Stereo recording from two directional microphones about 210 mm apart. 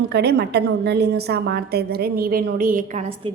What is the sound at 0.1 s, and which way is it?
A woman's voice, 50° right (ahead or behind).